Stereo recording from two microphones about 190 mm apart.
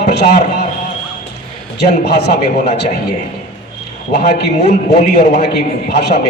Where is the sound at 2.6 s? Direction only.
35° left (ahead or behind).